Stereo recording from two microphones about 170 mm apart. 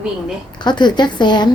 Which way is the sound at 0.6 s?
25° left (ahead or behind).